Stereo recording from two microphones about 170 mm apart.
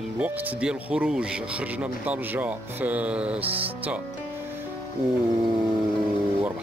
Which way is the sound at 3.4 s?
35° right (ahead or behind).